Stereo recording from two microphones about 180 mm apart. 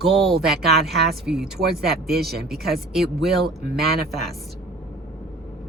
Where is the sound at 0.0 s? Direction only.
Centre (ahead or behind).